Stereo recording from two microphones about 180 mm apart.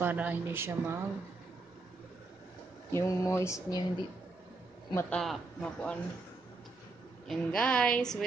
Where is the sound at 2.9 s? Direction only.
15° left (ahead or behind).